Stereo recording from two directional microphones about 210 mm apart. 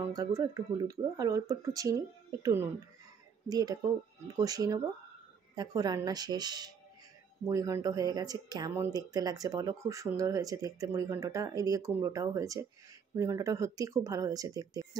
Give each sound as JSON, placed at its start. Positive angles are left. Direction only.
{"t": 0.0, "sound": "speech", "side_deg": -15}